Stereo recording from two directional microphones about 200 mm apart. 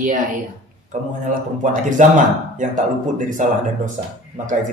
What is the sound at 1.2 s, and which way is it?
Speech, 40° right (ahead or behind).